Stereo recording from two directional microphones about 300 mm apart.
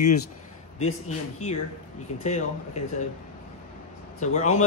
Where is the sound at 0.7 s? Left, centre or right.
Left.